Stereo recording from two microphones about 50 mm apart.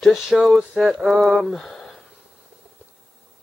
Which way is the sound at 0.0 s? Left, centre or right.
Centre.